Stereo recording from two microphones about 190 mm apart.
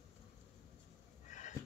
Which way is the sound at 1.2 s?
40° left (ahead or behind).